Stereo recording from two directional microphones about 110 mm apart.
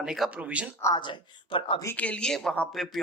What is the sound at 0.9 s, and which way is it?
Speech, 45° left (ahead or behind).